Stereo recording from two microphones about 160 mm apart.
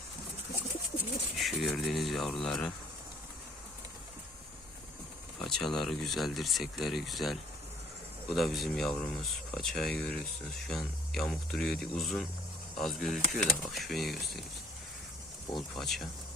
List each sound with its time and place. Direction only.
1.4 s a sound: centre (ahead or behind)
5.4 s speech: centre (ahead or behind)
15.5 s speech: centre (ahead or behind)